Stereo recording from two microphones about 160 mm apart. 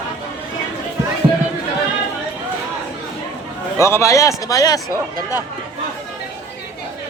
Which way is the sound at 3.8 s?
15° left (ahead or behind).